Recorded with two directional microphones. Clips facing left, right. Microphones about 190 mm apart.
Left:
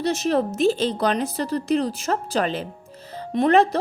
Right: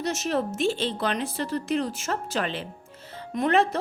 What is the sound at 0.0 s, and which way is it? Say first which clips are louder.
Speech: left 5 dB; 35° left (ahead or behind).